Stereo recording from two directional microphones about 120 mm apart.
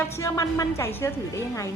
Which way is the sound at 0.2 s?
25° left (ahead or behind).